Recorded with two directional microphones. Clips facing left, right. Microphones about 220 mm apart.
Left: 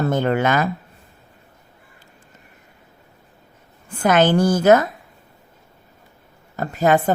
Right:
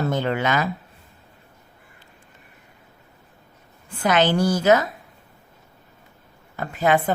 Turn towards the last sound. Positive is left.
turn(degrees=45)  # may be behind; listen again after turning